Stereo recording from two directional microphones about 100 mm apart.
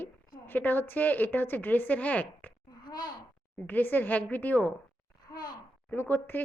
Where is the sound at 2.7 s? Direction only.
45° left (ahead or behind).